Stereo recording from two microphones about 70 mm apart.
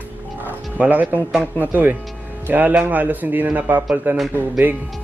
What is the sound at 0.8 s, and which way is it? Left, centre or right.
A man's voice, right.